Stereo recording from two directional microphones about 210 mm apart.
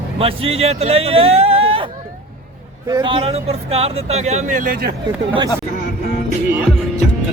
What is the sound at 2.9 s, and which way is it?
Speech, 25° right (ahead or behind).